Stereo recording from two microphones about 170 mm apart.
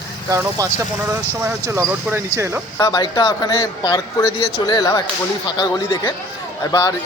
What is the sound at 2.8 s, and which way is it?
Speech, 25° left (ahead or behind).